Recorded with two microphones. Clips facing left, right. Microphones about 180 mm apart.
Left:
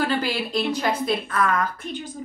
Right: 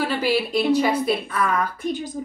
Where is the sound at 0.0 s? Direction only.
5° right (ahead or behind).